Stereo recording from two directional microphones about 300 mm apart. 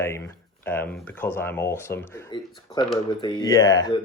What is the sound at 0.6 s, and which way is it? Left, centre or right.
Speech, centre.